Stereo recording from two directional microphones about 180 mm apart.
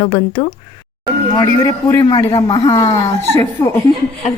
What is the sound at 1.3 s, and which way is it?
A man's voice, 20° left (ahead or behind).